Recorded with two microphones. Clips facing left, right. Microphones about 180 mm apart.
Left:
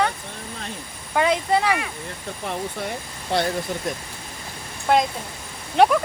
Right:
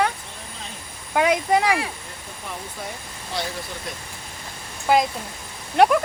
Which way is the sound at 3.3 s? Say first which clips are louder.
Left 7 dB; 65° left (ahead or behind).